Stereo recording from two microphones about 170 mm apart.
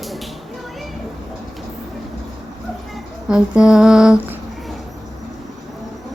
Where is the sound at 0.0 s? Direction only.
Centre (ahead or behind).